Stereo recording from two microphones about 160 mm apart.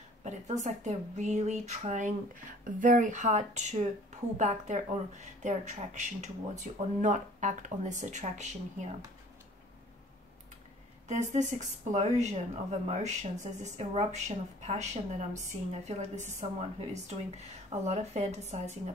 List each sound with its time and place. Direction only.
0.2 s a woman's voice: 45° right (ahead or behind)
11.1 s a woman's voice: 45° right (ahead or behind)